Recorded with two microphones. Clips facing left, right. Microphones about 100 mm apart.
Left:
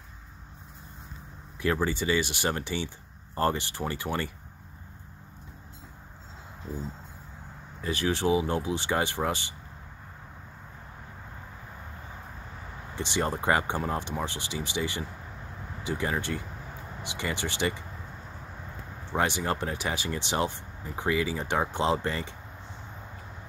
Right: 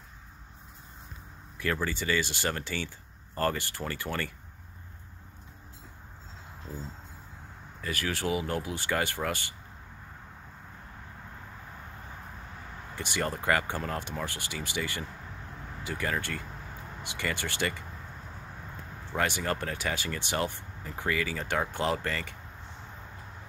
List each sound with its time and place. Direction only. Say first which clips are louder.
1.6 s speech: left 4 dB; 20° left (ahead or behind)
7.8 s speech: left 5 dB; 20° left (ahead or behind)
12.9 s speech: left 3 dB; 20° left (ahead or behind)
19.1 s speech: left 2 dB; 20° left (ahead or behind)